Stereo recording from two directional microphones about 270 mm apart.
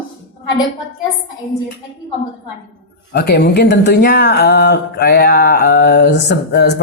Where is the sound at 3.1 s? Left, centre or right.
Left.